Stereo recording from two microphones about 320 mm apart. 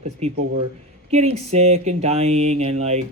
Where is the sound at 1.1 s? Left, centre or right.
Centre.